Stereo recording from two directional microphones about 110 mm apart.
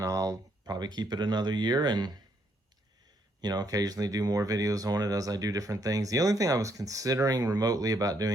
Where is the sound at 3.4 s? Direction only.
35° right (ahead or behind).